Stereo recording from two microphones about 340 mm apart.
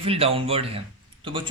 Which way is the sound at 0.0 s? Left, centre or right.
Centre.